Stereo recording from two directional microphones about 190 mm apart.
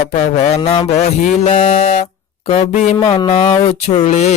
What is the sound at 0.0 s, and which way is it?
Speech, 35° left (ahead or behind).